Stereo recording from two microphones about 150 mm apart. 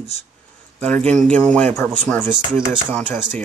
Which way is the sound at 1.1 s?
5° left (ahead or behind).